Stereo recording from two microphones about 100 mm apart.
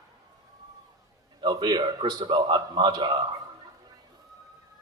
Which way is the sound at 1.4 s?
40° right (ahead or behind).